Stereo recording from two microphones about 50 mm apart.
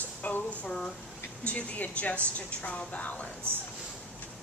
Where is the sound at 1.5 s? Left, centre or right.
Left.